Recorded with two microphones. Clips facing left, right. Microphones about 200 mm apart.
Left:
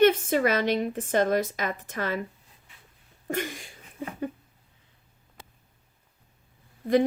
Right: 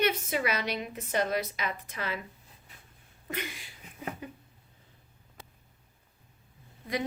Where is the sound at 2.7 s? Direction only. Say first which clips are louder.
Right 2 dB; 40° right (ahead or behind).